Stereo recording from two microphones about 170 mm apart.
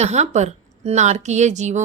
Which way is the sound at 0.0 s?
40° right (ahead or behind).